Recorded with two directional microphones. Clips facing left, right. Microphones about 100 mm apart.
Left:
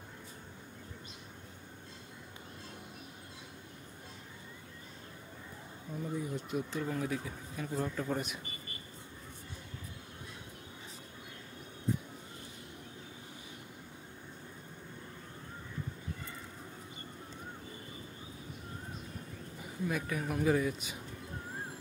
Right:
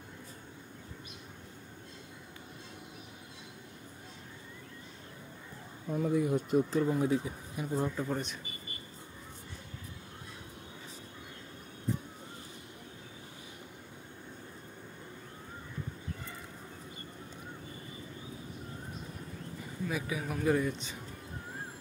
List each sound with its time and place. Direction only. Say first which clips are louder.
5.9 s speech: right 8 dB; 70° right (ahead or behind)
6.5 s speech: right 8 dB; 35° right (ahead or behind)
6.9 s speech: right 6 dB; 20° right (ahead or behind)
19.9 s a sound: even; 5° right (ahead or behind)
20.4 s speech: right 2 dB; centre (ahead or behind)